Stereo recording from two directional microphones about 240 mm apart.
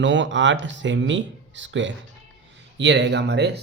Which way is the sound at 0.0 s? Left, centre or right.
Right.